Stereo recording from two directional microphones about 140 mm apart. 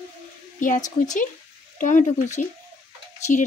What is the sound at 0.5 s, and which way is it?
A woman's voice, 70° left (ahead or behind).